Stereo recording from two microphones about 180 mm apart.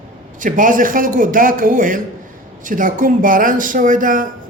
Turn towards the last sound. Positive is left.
turn(degrees=-50)  # may be behind; listen again after turning